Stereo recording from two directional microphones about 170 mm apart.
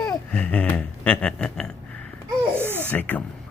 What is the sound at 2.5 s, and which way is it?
Baby laughter, 15° right (ahead or behind).